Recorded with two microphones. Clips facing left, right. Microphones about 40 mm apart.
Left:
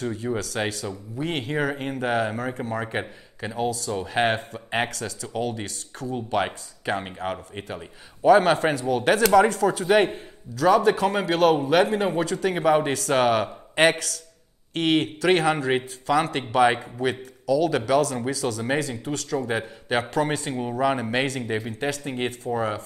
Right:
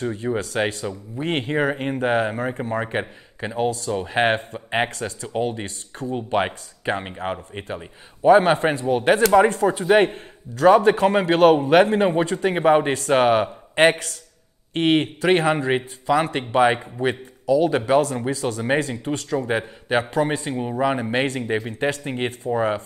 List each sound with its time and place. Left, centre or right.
0.0 s speech: right
1.2 s speech: right
3.0 s a man's voice: centre
3.5 s a man's voice: right
4.6 s speech: centre
4.8 s a man's voice: right
9.9 s a man's voice: right
15.7 s a man's voice: centre; by 19.3 s right
19.3 s speech: centre
21.7 s a man's voice: right
22.0 s speech: centre